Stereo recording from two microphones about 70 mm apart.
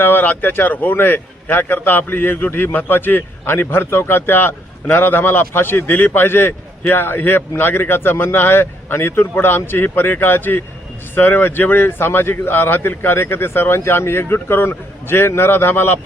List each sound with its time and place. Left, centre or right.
0.0 s a man's voice: left